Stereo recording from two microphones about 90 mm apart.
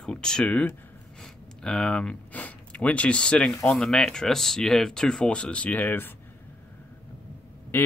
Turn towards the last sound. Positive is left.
turn(degrees=25)  # may be behind; listen again after turning